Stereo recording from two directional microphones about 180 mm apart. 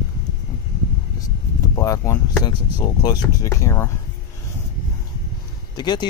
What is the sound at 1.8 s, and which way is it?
Speech, 15° left (ahead or behind).